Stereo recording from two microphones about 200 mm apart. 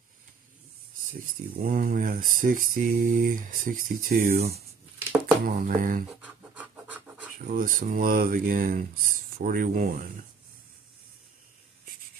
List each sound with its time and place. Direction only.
1.6 s speech: 45° right (ahead or behind)
5.5 s speech: 45° right (ahead or behind)
6.2 s scratch: 5° right (ahead or behind)
7.4 s speech: 45° right (ahead or behind)